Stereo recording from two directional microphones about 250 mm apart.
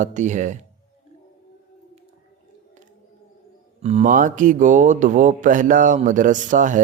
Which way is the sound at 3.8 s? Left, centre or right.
Right.